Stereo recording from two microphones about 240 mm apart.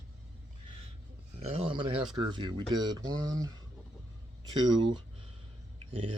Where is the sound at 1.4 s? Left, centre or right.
Right.